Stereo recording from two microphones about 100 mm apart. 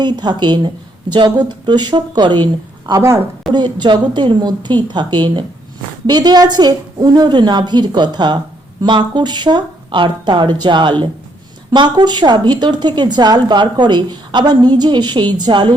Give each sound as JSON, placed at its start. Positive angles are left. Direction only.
{"t": 0.0, "sound": "a woman's voice", "side_deg": -45}